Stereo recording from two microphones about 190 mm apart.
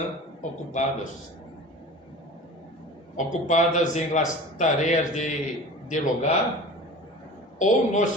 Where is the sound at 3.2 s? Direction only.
40° left (ahead or behind).